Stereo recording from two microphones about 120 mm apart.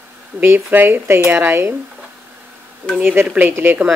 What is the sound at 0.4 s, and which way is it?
Speech, 15° right (ahead or behind).